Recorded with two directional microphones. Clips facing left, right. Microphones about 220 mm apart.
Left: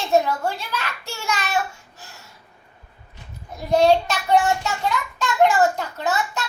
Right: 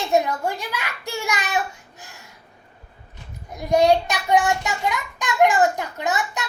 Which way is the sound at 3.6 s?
15° right (ahead or behind).